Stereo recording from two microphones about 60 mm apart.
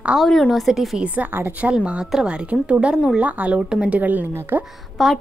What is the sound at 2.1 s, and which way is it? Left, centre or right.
A woman's voice, centre.